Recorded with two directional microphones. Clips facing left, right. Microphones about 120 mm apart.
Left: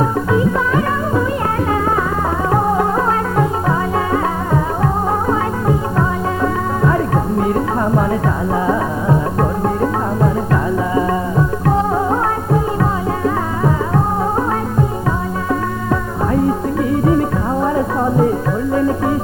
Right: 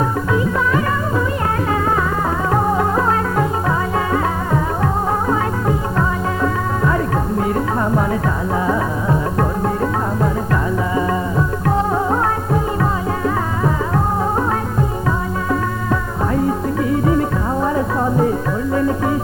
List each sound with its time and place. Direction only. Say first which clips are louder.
0.0 s music: left 3 dB; 25° left (ahead or behind)
2.5 s music: left 2 dB; 25° left (ahead or behind)
17.6 s music: left 2 dB; 25° left (ahead or behind)